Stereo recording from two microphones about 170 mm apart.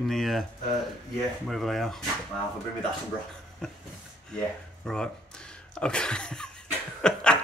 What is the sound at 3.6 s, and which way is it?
Speech, centre (ahead or behind).